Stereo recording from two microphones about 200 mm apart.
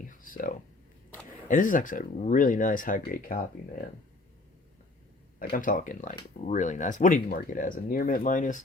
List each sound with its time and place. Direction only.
0.0 s a sound: 45° left (ahead or behind)
1.5 s speech: 40° left (ahead or behind)
5.4 s speech: 45° left (ahead or behind)